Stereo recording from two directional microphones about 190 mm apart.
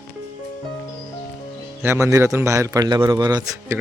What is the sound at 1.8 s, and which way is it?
A man's voice, 15° right (ahead or behind).